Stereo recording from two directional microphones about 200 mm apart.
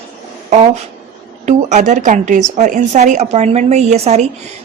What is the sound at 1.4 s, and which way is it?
A woman's voice, 35° right (ahead or behind).